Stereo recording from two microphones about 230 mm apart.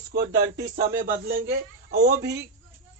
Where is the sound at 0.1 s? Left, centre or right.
Right.